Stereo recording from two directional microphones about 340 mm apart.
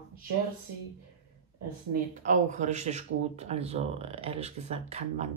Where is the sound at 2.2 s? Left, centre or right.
Right.